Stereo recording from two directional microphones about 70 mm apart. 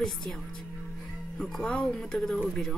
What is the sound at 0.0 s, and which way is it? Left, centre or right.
Speech, centre.